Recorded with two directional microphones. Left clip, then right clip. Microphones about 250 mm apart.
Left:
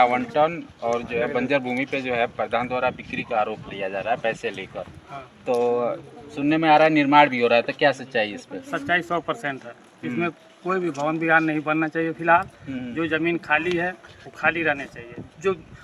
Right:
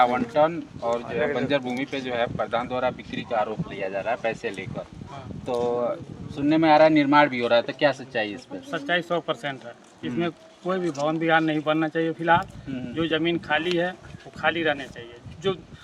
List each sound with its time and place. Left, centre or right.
0.0 s speech: centre
8.7 s speech: centre